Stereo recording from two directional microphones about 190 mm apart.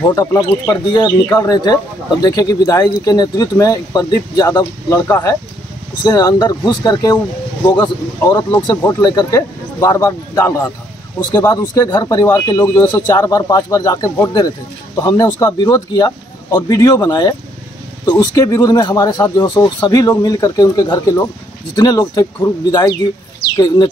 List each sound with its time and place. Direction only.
0.1 s speech: 20° left (ahead or behind)